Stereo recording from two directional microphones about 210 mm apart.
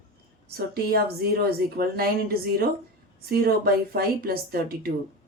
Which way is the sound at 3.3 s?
45° right (ahead or behind).